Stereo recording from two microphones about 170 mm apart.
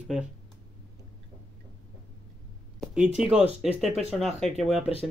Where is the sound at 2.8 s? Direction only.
5° right (ahead or behind).